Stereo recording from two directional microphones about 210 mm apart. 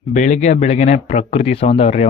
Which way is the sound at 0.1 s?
35° left (ahead or behind).